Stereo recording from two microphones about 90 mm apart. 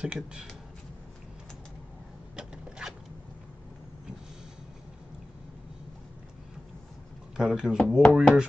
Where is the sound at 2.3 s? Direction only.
10° right (ahead or behind).